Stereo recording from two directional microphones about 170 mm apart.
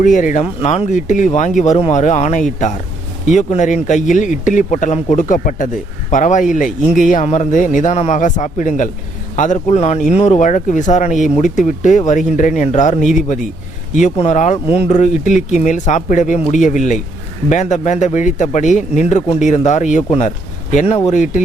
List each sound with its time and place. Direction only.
0.0 s speech: 50° left (ahead or behind)